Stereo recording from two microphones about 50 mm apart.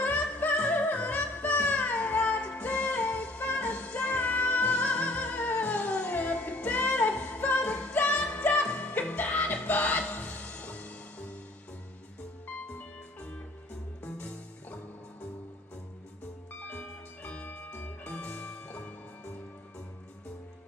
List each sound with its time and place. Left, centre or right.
0.0 s music: left
14.0 s music: left
16.6 s music: left